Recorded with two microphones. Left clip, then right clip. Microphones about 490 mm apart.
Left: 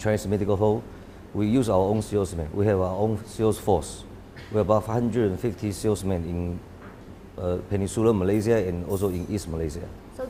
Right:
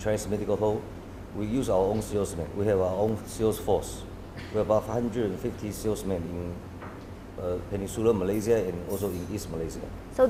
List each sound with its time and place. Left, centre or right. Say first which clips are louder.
0.0 s speech: left 3 dB; left
7.4 s speech: left 4 dB; left
10.2 s a woman's voice: right 12 dB; right